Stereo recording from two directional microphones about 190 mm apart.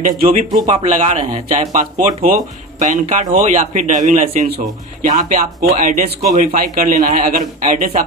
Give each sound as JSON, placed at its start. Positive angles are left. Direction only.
{"t": 0.2, "sound": "a man's voice", "side_deg": -45}